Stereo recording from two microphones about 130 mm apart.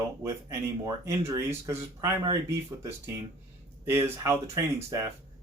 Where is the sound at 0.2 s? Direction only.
25° right (ahead or behind).